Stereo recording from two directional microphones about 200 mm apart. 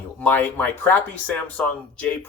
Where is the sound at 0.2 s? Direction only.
10° left (ahead or behind).